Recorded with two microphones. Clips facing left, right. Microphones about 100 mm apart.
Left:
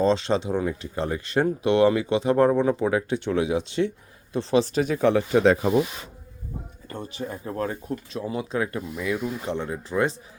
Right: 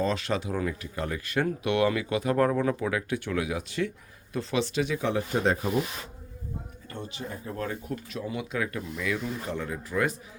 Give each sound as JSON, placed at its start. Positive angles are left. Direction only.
{"t": 0.0, "sound": "speech", "side_deg": 25}
{"t": 6.9, "sound": "speech", "side_deg": 35}
{"t": 9.1, "sound": "speech", "side_deg": 10}
{"t": 9.5, "sound": "speech", "side_deg": 25}